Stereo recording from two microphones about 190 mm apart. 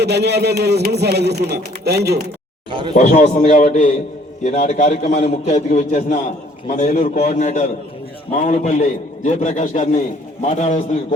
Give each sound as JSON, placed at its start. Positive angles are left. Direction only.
{"t": 0.0, "sound": "speech", "side_deg": -60}
{"t": 2.6, "sound": "speech", "side_deg": -25}
{"t": 2.9, "sound": "a man's voice", "side_deg": 45}